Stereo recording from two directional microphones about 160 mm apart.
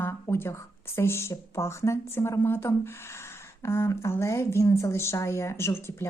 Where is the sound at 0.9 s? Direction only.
15° left (ahead or behind).